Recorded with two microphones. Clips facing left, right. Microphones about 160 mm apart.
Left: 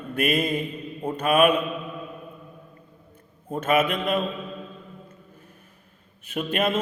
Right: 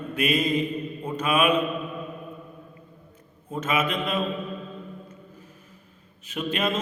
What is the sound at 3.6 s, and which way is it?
Mantra, 55° left (ahead or behind).